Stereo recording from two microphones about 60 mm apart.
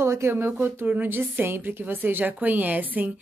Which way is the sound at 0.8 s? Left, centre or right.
Right.